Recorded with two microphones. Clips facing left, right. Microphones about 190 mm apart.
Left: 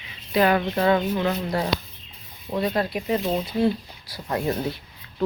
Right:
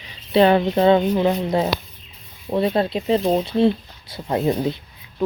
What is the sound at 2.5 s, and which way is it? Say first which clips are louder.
Speech: right 5 dB; 25° right (ahead or behind).